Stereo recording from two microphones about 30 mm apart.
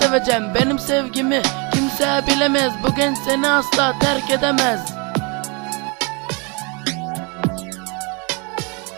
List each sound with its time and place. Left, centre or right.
0.0 s music: centre
7.4 s music: right